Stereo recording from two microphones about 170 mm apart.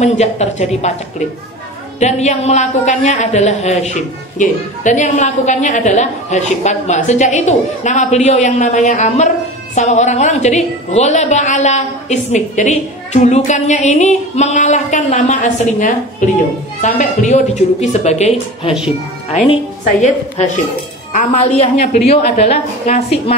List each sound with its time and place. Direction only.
0.0 s a woman's voice: 40° left (ahead or behind)
2.0 s a woman's voice: 40° left (ahead or behind)